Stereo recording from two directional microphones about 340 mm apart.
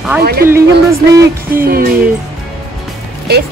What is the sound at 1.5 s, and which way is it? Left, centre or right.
Speech, right.